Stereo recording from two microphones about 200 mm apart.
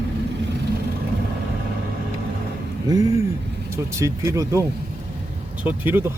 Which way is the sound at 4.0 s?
15° right (ahead or behind).